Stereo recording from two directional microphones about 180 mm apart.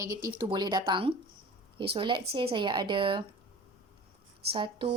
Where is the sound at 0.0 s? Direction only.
20° right (ahead or behind).